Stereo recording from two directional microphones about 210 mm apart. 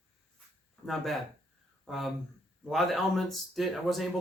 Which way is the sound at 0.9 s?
Centre (ahead or behind).